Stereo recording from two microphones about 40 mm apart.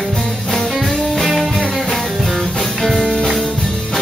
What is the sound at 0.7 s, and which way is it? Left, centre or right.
Music, centre.